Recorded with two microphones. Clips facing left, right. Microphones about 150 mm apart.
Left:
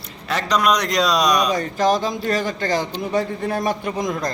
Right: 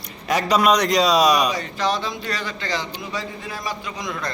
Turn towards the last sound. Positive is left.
turn(degrees=40)  # may be behind; listen again after turning